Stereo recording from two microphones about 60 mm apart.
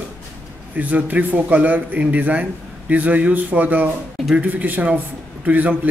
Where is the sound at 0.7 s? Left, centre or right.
Right.